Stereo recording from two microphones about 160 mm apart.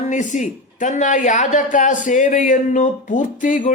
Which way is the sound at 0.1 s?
50° left (ahead or behind).